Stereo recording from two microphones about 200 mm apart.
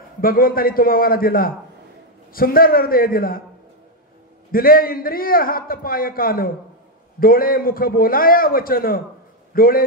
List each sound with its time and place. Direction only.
0.2 s a man's voice: 45° left (ahead or behind)
4.5 s a man's voice: 45° left (ahead or behind)